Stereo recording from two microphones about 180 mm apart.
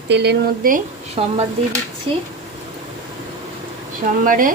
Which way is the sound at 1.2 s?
30° right (ahead or behind).